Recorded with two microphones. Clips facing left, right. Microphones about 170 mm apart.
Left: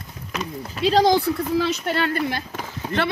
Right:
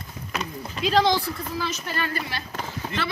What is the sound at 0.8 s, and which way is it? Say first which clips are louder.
Speech: left 4 dB; 40° left (ahead or behind).